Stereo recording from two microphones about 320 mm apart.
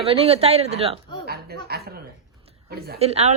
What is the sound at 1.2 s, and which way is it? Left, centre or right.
A woman's voice, right.